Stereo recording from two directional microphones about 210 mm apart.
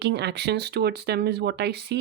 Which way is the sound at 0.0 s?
55° right (ahead or behind).